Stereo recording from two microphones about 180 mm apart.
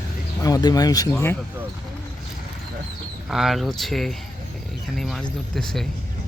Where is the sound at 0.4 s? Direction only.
20° left (ahead or behind).